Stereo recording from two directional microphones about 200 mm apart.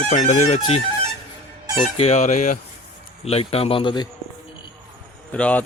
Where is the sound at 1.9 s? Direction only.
35° left (ahead or behind).